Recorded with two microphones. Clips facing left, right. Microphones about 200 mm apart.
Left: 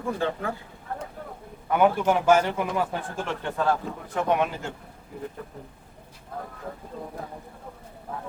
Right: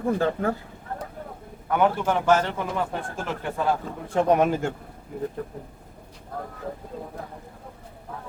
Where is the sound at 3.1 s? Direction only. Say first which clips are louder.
Even; centre (ahead or behind).